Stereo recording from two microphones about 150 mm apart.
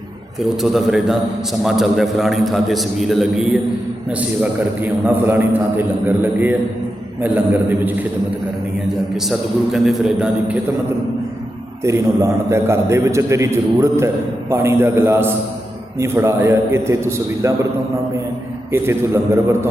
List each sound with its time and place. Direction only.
0.6 s a man's voice: centre (ahead or behind)
4.4 s a man's voice: 10° right (ahead or behind)
9.3 s a man's voice: centre (ahead or behind)
11.8 s a man's voice: 20° right (ahead or behind)
18.7 s a man's voice: 15° right (ahead or behind)